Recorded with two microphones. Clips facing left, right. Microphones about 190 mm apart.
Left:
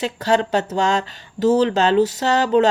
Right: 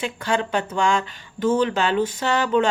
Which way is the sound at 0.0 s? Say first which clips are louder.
Left 5 dB; 40° left (ahead or behind).